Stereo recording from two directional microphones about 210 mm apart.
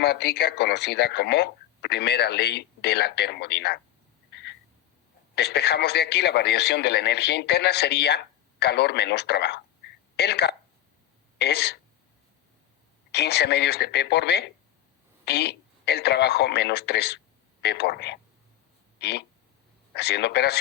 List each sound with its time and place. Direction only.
0.0 s speech: 55° left (ahead or behind)
4.3 s frog: 55° left (ahead or behind)
5.3 s speech: 50° left (ahead or behind)
13.1 s speech: 55° left (ahead or behind)
18.9 s a sound: 55° left (ahead or behind)
19.9 s speech: 50° left (ahead or behind)